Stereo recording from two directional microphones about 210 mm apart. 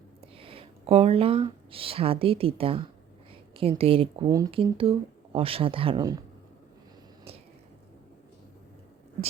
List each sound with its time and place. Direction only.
0.2 s speech: 25° right (ahead or behind)